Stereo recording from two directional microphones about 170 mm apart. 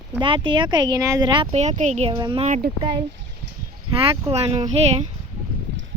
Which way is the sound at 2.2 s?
25° right (ahead or behind).